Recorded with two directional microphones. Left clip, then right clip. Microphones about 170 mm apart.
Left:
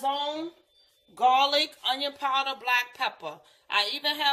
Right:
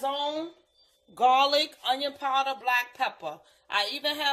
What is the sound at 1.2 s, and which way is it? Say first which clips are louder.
A woman's voice: even; 60° right (ahead or behind).